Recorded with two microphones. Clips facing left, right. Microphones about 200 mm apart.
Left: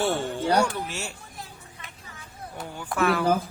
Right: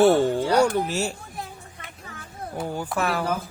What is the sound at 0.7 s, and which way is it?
Speech, 40° right (ahead or behind).